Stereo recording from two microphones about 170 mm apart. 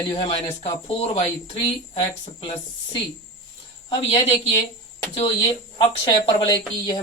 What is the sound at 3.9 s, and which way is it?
Speech, 30° left (ahead or behind).